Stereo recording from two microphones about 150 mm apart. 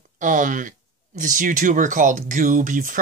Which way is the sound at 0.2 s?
60° right (ahead or behind).